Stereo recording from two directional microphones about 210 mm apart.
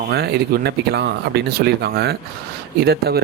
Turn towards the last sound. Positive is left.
turn(degrees=-50)  # may be behind; listen again after turning